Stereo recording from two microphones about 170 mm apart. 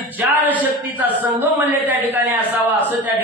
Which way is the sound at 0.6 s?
10° right (ahead or behind).